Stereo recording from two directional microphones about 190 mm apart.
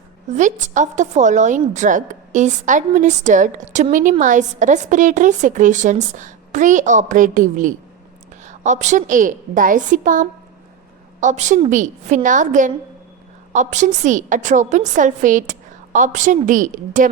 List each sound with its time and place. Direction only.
0.3 s a woman's voice: 40° right (ahead or behind)